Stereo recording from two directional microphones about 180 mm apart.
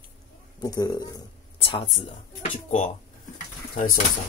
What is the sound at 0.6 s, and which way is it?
Speech, 20° left (ahead or behind).